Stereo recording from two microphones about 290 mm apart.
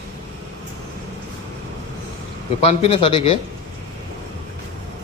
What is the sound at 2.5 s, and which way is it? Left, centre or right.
Speech, centre.